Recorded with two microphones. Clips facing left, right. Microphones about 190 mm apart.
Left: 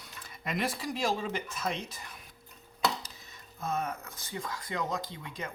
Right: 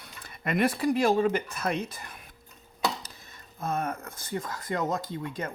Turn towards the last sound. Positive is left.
turn(degrees=-50)  # may be behind; listen again after turning